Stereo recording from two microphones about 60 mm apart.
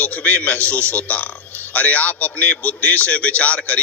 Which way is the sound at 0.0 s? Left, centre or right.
Left.